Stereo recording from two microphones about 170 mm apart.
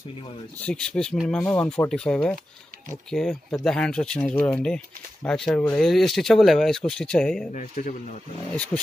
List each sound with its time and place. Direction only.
0.6 s speech: 5° left (ahead or behind)
7.5 s speech: 45° left (ahead or behind)